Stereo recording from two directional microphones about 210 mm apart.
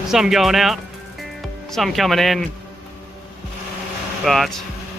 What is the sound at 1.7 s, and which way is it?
Speech, centre (ahead or behind).